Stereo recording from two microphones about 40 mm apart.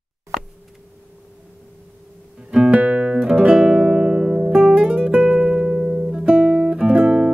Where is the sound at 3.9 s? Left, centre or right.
Centre.